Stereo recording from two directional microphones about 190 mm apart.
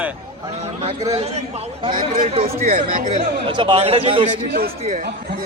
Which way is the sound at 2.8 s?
45° right (ahead or behind).